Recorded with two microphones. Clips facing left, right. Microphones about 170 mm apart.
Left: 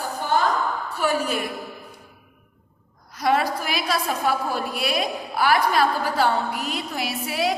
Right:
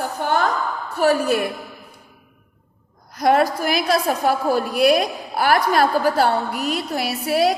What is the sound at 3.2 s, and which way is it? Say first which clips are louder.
A woman's voice: right 5 dB; 50° right (ahead or behind).